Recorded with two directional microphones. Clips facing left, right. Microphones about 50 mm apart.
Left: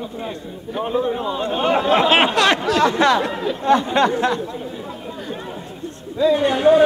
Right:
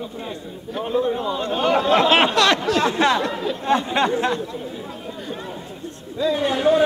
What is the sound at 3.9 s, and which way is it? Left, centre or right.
Speech, centre.